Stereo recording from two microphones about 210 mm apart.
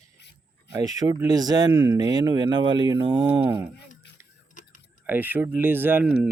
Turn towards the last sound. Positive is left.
turn(degrees=-10)  # may be behind; listen again after turning